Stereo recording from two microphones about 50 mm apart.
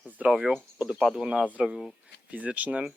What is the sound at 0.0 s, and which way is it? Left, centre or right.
Cricket, right.